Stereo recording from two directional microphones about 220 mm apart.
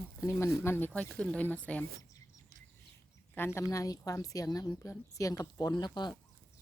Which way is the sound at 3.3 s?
10° left (ahead or behind).